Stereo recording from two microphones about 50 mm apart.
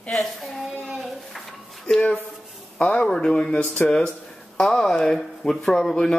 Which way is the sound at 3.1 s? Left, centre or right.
Centre.